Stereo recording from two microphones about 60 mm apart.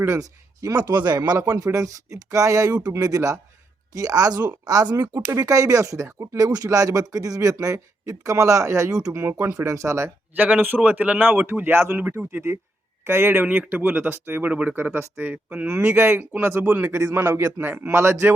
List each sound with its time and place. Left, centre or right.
0.2 s speech: right
5.1 s speech: right
10.3 s a man's voice: right
13.1 s speech: right
13.4 s speech: right